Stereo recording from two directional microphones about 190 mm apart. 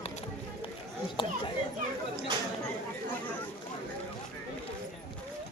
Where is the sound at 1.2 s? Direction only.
25° left (ahead or behind).